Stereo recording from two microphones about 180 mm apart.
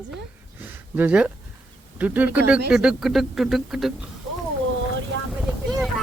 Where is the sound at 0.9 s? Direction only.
5° right (ahead or behind).